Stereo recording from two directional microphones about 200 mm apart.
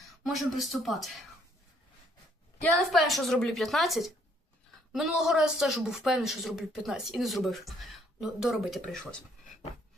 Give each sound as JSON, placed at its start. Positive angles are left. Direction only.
{"t": 0.2, "sound": "speech", "side_deg": 0}
{"t": 2.6, "sound": "speech", "side_deg": 0}